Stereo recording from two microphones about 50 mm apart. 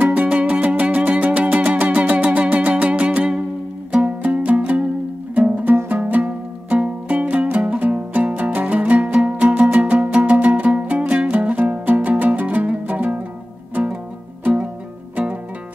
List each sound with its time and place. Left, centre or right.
0.0 s music: right
5.9 s music: right